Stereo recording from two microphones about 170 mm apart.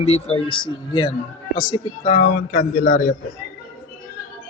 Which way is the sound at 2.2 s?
50° left (ahead or behind).